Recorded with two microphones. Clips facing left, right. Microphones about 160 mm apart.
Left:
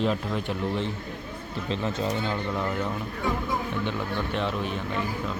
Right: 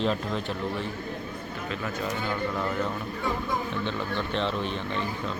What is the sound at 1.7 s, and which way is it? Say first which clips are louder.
Speech: left 4 dB; 25° left (ahead or behind).